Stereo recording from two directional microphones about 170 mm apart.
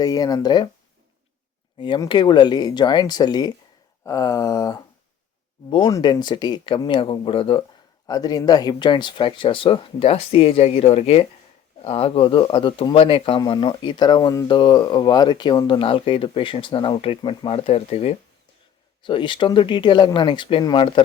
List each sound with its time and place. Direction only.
0.0 s speech: 20° left (ahead or behind)
1.8 s speech: 30° left (ahead or behind)
8.0 s speech: 20° left (ahead or behind)